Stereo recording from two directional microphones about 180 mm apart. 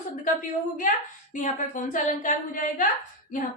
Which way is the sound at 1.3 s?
45° left (ahead or behind).